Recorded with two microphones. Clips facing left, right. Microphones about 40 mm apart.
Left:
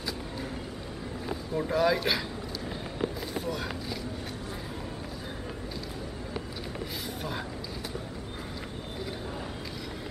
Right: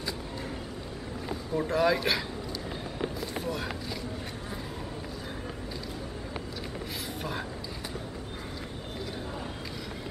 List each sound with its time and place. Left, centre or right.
1.5 s speech: centre
3.4 s speech: centre